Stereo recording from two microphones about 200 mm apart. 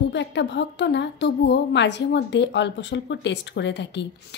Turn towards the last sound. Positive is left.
turn(degrees=60)  # may be behind; listen again after turning